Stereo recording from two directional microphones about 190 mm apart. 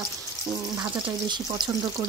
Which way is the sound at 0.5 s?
20° right (ahead or behind).